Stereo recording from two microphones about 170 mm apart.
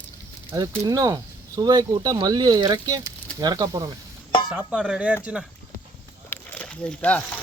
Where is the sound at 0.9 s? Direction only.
20° right (ahead or behind).